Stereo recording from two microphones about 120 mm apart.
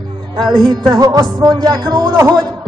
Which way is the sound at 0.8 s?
30° right (ahead or behind).